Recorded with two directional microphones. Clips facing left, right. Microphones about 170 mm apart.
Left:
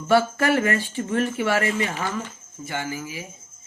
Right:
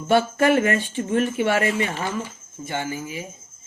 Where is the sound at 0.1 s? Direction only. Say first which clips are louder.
Right 1 dB; 20° right (ahead or behind).